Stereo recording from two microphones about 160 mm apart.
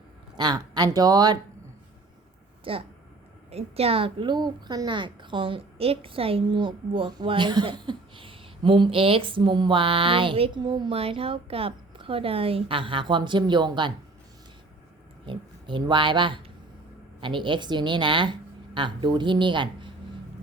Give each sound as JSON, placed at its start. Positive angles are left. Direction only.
{"t": 0.3, "sound": "speech", "side_deg": -25}
{"t": 2.7, "sound": "a woman's voice", "side_deg": -35}
{"t": 15.3, "sound": "a woman's voice", "side_deg": -30}